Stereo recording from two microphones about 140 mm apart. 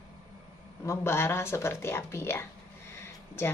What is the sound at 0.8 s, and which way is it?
Speech, 20° left (ahead or behind).